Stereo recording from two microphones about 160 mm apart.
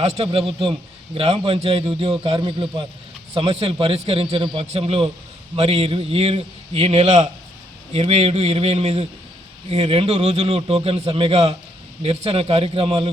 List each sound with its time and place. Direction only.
0.0 s a man's voice: 40° right (ahead or behind)